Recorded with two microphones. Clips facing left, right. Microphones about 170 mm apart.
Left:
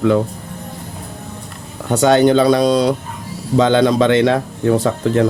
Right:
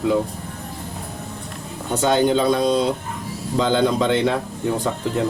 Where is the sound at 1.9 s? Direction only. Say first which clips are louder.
Left 6 dB; 75° left (ahead or behind).